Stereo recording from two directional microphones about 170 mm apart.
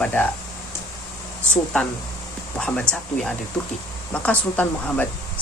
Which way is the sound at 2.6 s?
5° left (ahead or behind).